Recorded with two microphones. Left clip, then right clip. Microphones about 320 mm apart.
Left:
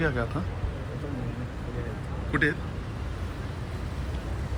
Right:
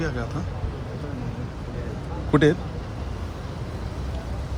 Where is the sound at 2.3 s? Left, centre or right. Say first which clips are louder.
Right 7 dB; centre.